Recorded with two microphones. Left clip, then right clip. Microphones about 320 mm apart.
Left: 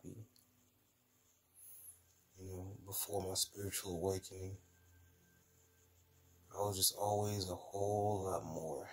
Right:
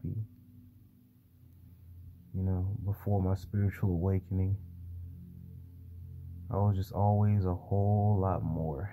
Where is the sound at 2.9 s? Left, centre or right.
Centre.